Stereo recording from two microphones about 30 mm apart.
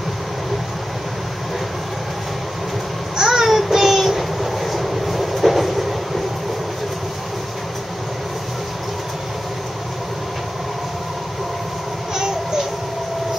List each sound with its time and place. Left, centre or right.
3.2 s babbling: centre
3.4 s child singing: centre